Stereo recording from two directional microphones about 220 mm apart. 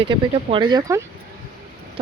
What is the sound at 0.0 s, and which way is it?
Speech, 20° right (ahead or behind).